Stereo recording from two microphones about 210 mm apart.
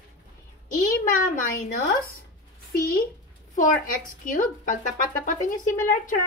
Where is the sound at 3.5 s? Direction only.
40° left (ahead or behind).